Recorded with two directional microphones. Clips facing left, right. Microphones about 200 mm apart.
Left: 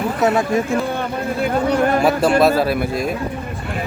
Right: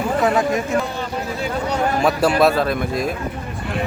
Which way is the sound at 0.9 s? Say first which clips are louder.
Left 4 dB; 55° left (ahead or behind).